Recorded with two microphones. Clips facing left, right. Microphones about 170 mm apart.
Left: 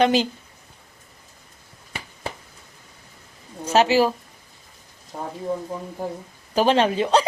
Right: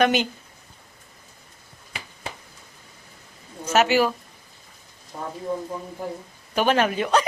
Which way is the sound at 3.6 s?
30° left (ahead or behind).